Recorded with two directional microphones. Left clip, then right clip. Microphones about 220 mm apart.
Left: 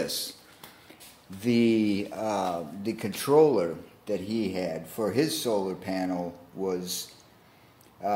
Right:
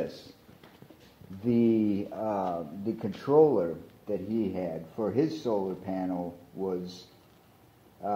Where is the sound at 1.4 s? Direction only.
25° left (ahead or behind).